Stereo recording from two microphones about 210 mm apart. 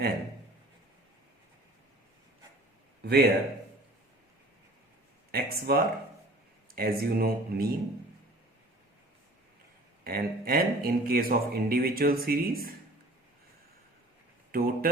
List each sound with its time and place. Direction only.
3.0 s a man's voice: 50° right (ahead or behind)
5.3 s speech: 45° right (ahead or behind)
10.0 s speech: 45° right (ahead or behind)
14.5 s speech: 45° right (ahead or behind)